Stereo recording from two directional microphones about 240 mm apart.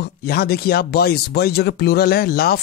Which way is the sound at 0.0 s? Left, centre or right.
Left.